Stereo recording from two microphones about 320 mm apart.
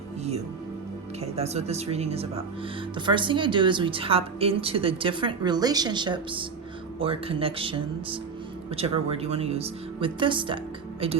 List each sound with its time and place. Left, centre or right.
1.2 s a woman's voice: centre